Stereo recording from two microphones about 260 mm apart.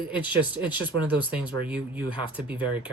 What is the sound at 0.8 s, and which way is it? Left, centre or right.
Speech, centre.